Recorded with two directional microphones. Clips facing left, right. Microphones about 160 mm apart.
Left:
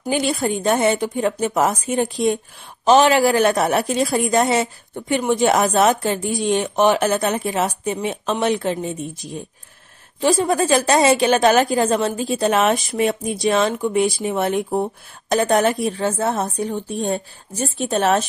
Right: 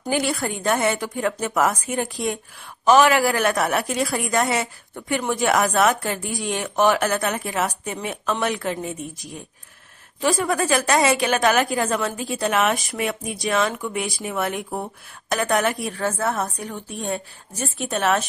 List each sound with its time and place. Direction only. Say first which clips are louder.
0.1 s a woman's voice: left 3 dB; 20° left (ahead or behind)